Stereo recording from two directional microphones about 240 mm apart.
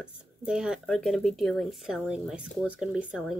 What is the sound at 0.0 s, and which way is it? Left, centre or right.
Speech, centre.